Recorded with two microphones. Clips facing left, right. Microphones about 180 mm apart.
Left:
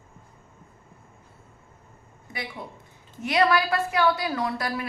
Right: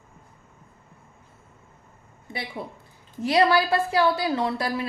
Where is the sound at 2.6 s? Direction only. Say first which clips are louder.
Right 4 dB; 30° right (ahead or behind).